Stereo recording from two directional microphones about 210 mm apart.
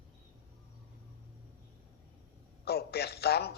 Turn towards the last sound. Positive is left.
turn(degrees=50)  # may be behind; listen again after turning